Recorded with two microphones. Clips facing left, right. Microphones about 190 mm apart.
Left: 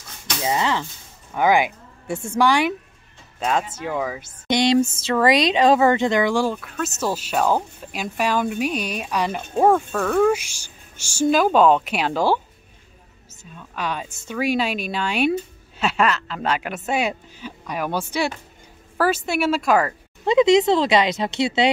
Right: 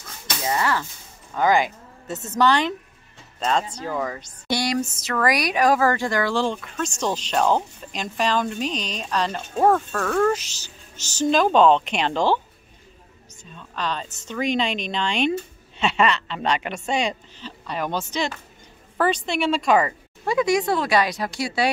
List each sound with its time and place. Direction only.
0.4 s speech: 20° left (ahead or behind)
4.3 s speech: 20° left (ahead or behind); by 12.4 s 5° left (ahead or behind)
13.4 s speech: 10° left (ahead or behind)
20.2 s speech: 20° left (ahead or behind)